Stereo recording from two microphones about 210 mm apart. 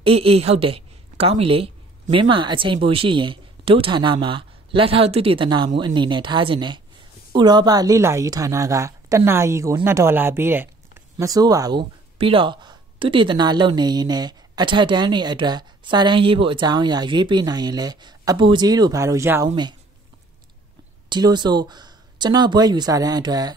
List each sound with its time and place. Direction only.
0.0 s a woman's voice: 25° right (ahead or behind)
21.1 s speech: 20° right (ahead or behind)